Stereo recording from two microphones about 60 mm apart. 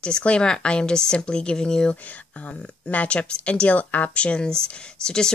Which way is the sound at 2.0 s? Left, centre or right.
Left.